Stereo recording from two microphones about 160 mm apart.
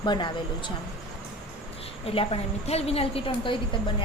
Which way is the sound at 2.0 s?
35° left (ahead or behind).